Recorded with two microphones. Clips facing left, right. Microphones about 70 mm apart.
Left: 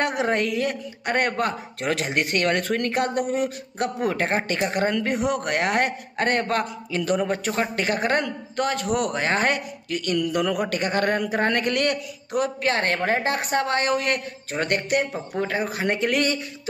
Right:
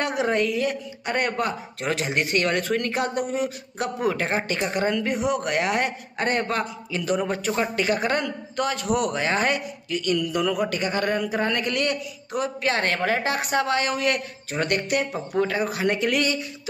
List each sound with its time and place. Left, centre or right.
0.0 s speech: left
12.4 s a woman's voice: left